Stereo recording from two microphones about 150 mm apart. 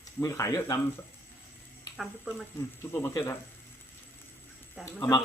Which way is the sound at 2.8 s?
15° left (ahead or behind).